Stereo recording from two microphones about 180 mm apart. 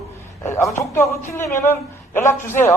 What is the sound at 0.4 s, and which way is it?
A man's voice, 15° left (ahead or behind).